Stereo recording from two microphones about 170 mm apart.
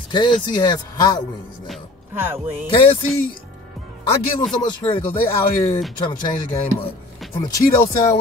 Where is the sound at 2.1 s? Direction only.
15° right (ahead or behind).